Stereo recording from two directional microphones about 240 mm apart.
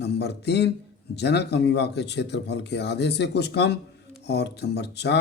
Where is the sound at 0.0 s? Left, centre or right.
Left.